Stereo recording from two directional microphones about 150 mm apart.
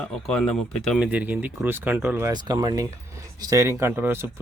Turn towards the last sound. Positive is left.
turn(degrees=-15)  # may be behind; listen again after turning